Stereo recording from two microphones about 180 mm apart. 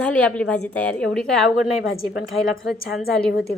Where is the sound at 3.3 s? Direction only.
60° left (ahead or behind).